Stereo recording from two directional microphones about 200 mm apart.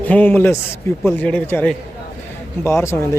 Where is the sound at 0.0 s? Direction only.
10° left (ahead or behind).